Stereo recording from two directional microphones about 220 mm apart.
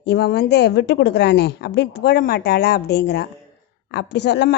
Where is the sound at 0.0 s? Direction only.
50° left (ahead or behind).